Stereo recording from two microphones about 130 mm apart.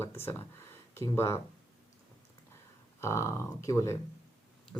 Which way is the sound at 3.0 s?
20° left (ahead or behind).